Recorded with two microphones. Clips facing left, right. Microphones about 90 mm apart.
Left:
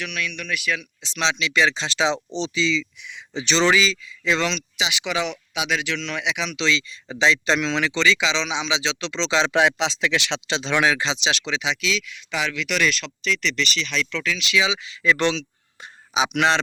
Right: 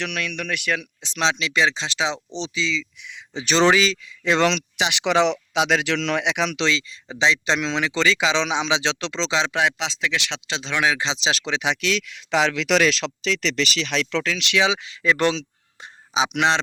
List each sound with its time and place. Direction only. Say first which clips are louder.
0.0 s speech: right 2 dB; 75° right (ahead or behind); by 1.6 s 40° right (ahead or behind)
1.6 s speech: left 2 dB; 15° right (ahead or behind)
2.6 s speech: left 3 dB; centre (ahead or behind)
3.7 s speech: right 1 dB; 50° right (ahead or behind)
7.1 s speech: left 1 dB; 20° right (ahead or behind)
7.9 s speech: right 3 dB; 40° right (ahead or behind)
9.5 s speech: left 3 dB; centre (ahead or behind)
11.0 s speech: left 1 dB; 25° right (ahead or behind)
11.3 s speech: right 4 dB; 45° right (ahead or behind)
15.8 s a sound: even; 30° right (ahead or behind)
16.3 s speech: left 1 dB; 20° right (ahead or behind)